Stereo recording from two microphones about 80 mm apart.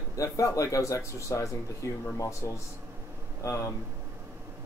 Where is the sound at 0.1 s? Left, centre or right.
Left.